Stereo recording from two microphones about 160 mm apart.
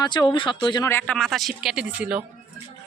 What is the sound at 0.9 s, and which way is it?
Speech, 10° left (ahead or behind).